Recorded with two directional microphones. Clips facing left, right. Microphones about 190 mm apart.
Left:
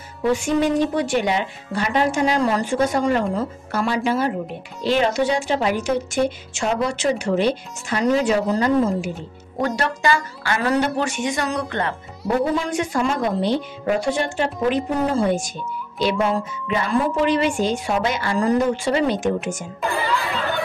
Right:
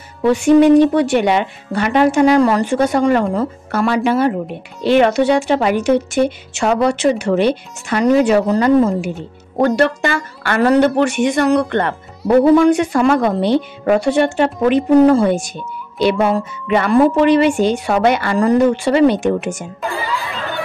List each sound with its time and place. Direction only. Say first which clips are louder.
0.2 s a woman's voice: right 9 dB; 65° right (ahead or behind)